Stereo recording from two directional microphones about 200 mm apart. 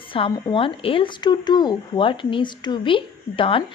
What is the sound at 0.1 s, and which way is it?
A woman's voice, 25° left (ahead or behind).